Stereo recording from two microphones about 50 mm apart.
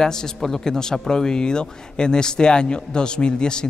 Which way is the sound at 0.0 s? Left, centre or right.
Centre.